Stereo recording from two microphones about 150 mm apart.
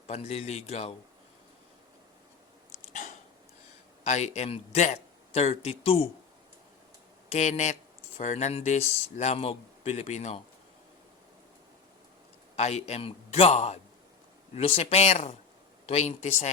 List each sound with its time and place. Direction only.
0.1 s speech: 45° left (ahead or behind)
2.7 s hiccup: 55° left (ahead or behind)
4.0 s speech: 50° left (ahead or behind)
7.3 s speech: 50° left (ahead or behind)
12.5 s speech: 45° left (ahead or behind)